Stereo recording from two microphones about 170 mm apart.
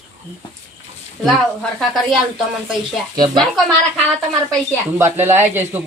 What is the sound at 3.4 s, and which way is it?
Speech, centre (ahead or behind).